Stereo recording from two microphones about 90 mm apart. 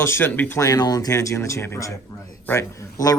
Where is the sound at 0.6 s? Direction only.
45° left (ahead or behind).